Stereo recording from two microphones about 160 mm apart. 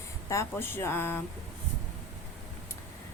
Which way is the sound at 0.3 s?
15° left (ahead or behind).